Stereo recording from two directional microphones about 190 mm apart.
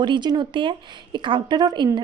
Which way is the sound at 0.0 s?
25° right (ahead or behind).